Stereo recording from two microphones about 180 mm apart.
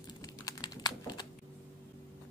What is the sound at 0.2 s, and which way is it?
Typing, 20° left (ahead or behind).